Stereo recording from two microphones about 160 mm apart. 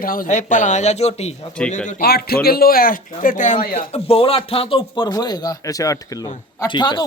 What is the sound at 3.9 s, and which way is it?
Speech, 40° left (ahead or behind).